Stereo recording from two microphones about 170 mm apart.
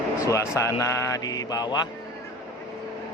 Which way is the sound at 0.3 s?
15° left (ahead or behind).